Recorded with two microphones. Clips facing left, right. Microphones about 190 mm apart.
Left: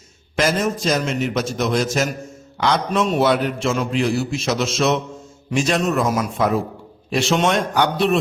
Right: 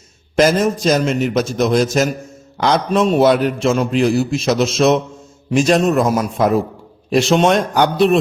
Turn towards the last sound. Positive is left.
turn(degrees=-40)  # may be behind; listen again after turning